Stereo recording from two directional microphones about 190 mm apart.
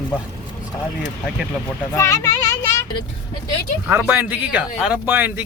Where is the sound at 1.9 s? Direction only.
15° left (ahead or behind).